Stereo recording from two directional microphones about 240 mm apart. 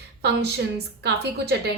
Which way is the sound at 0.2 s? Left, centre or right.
Right.